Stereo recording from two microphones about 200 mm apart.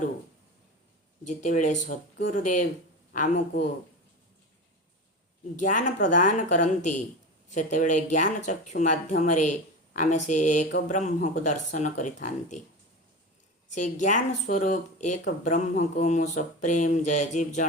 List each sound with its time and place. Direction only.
1.2 s mantra: 40° left (ahead or behind)
3.1 s speech: 45° left (ahead or behind)
5.5 s mantra: 40° left (ahead or behind)
13.7 s mantra: 40° left (ahead or behind)